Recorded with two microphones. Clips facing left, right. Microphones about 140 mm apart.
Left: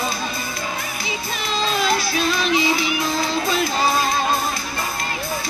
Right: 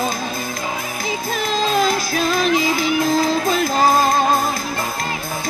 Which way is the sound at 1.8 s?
45° right (ahead or behind).